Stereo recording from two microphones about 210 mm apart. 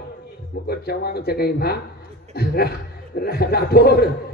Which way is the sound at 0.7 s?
50° left (ahead or behind).